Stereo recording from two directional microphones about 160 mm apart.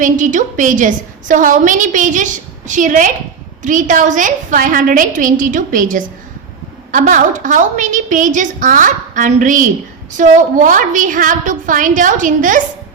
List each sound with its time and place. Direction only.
0.0 s a woman's voice: 50° right (ahead or behind)